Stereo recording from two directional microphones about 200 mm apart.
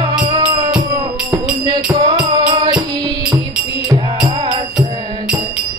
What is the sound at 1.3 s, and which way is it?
Music, 15° right (ahead or behind).